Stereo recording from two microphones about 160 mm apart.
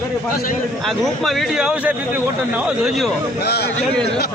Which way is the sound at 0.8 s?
Centre (ahead or behind).